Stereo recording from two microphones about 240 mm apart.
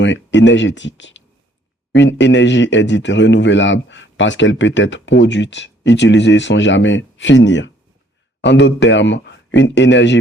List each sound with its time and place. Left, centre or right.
0.0 s a man's voice: left